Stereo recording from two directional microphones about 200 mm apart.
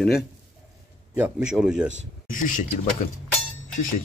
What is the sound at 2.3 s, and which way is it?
Speech, 40° left (ahead or behind).